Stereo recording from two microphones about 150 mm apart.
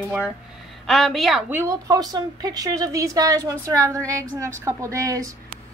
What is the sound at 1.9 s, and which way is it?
A woman's voice, 25° right (ahead or behind).